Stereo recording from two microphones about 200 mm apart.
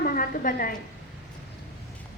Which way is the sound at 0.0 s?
45° left (ahead or behind).